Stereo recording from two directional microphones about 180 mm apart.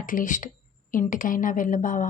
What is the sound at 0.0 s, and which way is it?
A woman's voice, 50° left (ahead or behind).